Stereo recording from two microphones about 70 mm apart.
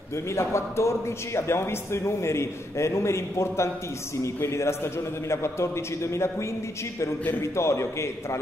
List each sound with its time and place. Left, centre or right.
0.3 s a man's voice: left
7.5 s a man's voice: left